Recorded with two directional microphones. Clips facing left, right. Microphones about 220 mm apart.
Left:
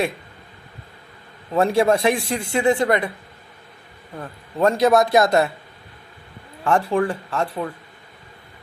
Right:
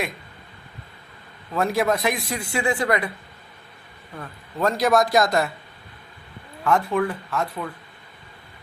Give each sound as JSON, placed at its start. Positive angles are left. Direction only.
{"t": 1.5, "sound": "a man's voice", "side_deg": 30}
{"t": 4.2, "sound": "a man's voice", "side_deg": 25}
{"t": 6.7, "sound": "speech", "side_deg": 30}